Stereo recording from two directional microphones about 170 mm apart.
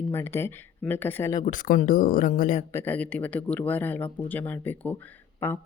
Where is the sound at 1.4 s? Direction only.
50° left (ahead or behind).